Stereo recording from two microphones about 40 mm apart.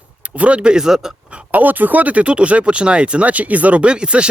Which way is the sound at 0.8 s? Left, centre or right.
Centre.